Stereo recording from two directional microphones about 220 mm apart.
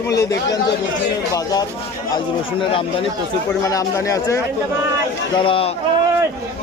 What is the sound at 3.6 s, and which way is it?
Speech, 15° left (ahead or behind).